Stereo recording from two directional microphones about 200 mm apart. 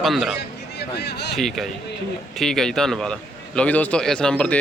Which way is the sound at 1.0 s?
55° left (ahead or behind).